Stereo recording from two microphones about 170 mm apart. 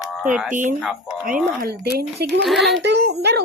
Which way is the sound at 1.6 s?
65° right (ahead or behind).